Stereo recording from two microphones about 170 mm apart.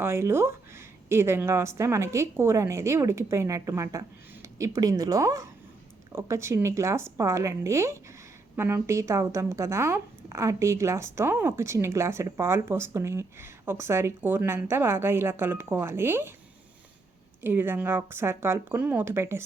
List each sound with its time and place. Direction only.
0.0 s speech: 15° right (ahead or behind)
17.4 s speech: 10° right (ahead or behind)